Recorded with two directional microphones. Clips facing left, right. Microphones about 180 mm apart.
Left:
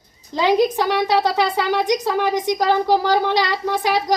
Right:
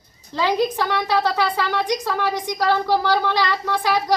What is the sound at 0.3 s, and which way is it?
A woman's voice, 20° left (ahead or behind).